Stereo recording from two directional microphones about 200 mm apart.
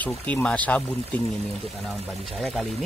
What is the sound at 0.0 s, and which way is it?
Speech, 5° left (ahead or behind).